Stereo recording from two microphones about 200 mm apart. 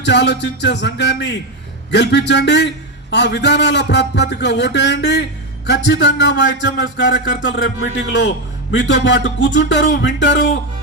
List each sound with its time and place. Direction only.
0.0 s a man's voice: 60° left (ahead or behind)